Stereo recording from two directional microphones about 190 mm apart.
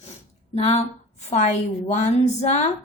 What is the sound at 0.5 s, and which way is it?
A woman's voice, 35° left (ahead or behind).